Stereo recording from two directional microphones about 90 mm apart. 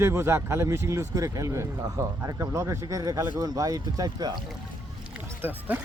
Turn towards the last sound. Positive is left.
turn(degrees=-25)  # may be behind; listen again after turning